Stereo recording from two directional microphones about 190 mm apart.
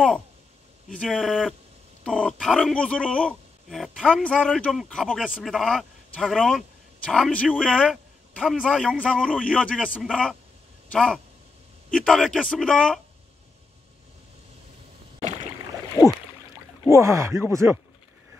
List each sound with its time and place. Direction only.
0.8 s speech: centre (ahead or behind)
15.1 s rowboat: 35° right (ahead or behind)
16.9 s speech: 15° right (ahead or behind)